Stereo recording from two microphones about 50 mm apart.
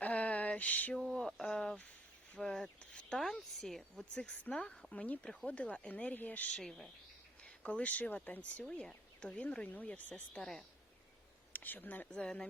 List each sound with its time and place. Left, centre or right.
0.0 s a sound: left
1.1 s a sound: centre
3.6 s speech: centre
4.1 s speech: centre
4.9 s speech: left
6.5 s speech: centre
7.4 s speech: left
8.7 s speech: left
10.4 s speech: centre
11.5 s speech: left
12.1 s speech: centre